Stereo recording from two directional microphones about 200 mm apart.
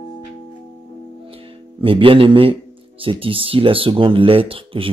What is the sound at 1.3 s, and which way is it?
Music, 25° right (ahead or behind).